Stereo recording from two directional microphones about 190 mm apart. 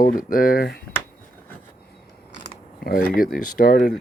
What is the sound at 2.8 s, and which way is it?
Speech, 50° left (ahead or behind).